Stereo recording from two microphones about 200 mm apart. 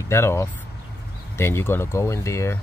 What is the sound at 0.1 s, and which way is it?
Speech, 15° left (ahead or behind).